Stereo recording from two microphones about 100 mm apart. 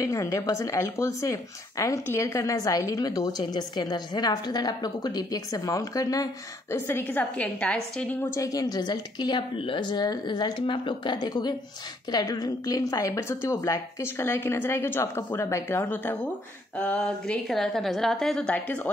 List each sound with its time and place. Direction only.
0.0 s a woman's voice: 30° left (ahead or behind)
6.7 s a woman's voice: 20° left (ahead or behind)
8.2 s a woman's voice: 30° left (ahead or behind); by 17.4 s 15° left (ahead or behind)
17.5 s a woman's voice: centre (ahead or behind)